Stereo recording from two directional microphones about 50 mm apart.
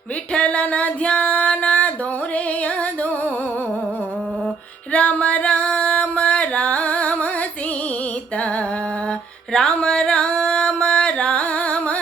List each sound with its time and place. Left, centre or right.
0.3 s female singing: left
4.9 s music: left
9.5 s music: centre